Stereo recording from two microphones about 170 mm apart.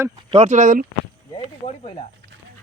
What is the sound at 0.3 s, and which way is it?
Speech, 40° right (ahead or behind).